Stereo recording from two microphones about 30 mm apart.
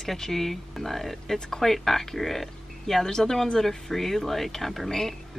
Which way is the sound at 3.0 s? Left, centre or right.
Centre.